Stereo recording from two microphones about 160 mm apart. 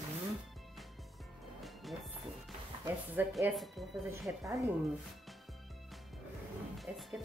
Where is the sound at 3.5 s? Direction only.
Centre (ahead or behind).